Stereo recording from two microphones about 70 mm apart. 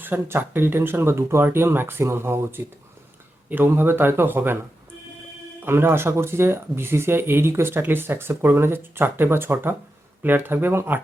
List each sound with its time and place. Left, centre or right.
0.0 s speech: right
5.6 s speech: right